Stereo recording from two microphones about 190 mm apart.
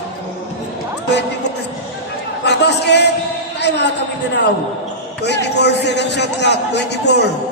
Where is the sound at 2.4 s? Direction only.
65° left (ahead or behind).